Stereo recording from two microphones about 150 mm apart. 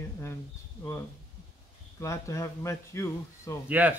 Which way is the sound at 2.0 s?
20° left (ahead or behind).